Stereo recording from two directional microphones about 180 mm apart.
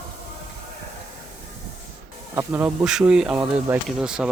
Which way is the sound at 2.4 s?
10° right (ahead or behind).